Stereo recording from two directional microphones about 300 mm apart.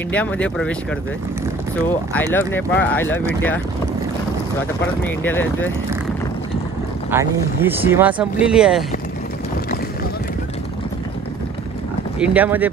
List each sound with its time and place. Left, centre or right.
0.1 s speech: centre
2.3 s speech: centre
5.0 s speech: centre
7.1 s speech: centre
12.2 s speech: centre